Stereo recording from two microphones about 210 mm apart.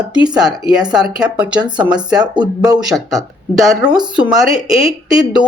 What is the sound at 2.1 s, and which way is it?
Speech, 20° right (ahead or behind).